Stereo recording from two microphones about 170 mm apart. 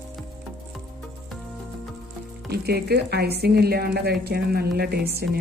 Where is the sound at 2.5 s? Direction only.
70° right (ahead or behind).